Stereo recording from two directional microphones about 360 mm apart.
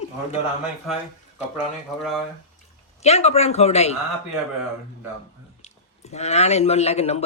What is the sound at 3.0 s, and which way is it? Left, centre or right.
Speech, centre.